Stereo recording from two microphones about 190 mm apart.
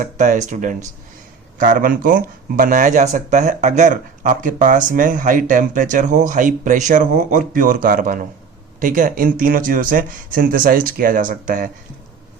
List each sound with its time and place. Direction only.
0.0 s speech: 40° right (ahead or behind)